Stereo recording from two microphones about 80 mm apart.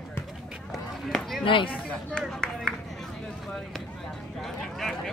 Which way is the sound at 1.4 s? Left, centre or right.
Left.